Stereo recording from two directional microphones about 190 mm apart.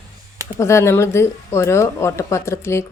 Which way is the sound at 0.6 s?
15° left (ahead or behind).